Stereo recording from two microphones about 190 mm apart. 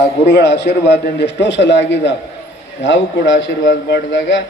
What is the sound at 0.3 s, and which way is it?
A man's voice, 70° left (ahead or behind).